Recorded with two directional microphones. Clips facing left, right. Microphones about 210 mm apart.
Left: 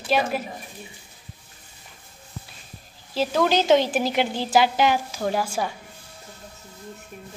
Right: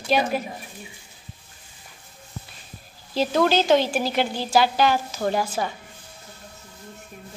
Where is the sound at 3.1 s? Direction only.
5° left (ahead or behind).